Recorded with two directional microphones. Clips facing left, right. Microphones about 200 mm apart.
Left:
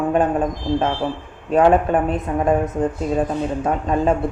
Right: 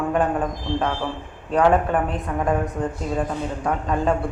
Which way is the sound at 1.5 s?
20° left (ahead or behind).